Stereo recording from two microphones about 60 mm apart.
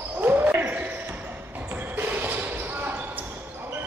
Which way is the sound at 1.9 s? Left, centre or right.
Right.